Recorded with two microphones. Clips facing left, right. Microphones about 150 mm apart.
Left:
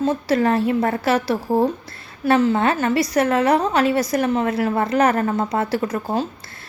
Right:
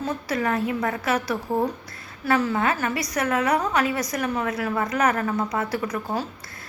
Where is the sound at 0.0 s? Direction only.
30° left (ahead or behind).